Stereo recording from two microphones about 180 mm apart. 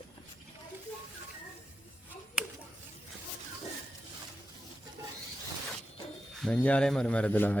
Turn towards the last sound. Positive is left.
turn(degrees=10)  # may be behind; listen again after turning